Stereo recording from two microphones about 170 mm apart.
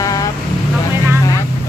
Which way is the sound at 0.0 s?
20° left (ahead or behind).